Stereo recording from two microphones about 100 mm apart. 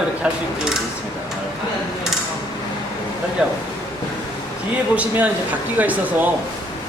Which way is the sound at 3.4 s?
10° right (ahead or behind).